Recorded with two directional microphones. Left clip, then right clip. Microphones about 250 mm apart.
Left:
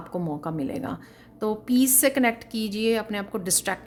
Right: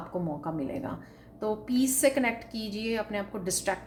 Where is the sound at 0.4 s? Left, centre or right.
Left.